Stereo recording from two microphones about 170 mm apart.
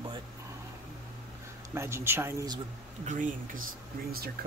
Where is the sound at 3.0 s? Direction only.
50° right (ahead or behind).